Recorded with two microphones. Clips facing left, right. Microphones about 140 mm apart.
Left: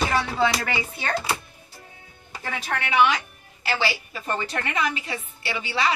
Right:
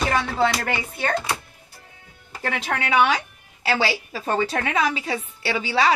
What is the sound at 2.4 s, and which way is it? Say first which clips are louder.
Speech: right 4 dB; 75° right (ahead or behind).